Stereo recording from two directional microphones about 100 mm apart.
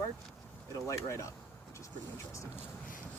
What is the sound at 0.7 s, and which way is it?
Speech, 30° left (ahead or behind).